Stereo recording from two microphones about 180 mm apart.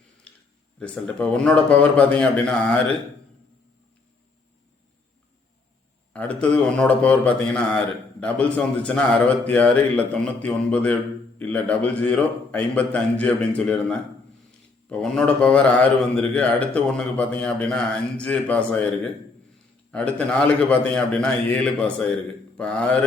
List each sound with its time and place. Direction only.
0.8 s a man's voice: 5° left (ahead or behind)
6.1 s a man's voice: 10° left (ahead or behind)
19.9 s speech: 5° left (ahead or behind)